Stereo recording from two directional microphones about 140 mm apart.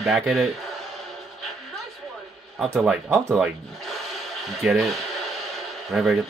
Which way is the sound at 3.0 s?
15° right (ahead or behind).